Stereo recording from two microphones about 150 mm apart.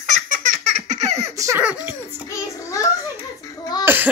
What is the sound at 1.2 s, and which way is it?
Baby laughter, 20° right (ahead or behind).